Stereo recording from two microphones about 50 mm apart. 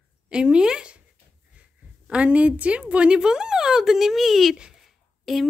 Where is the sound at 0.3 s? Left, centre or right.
Centre.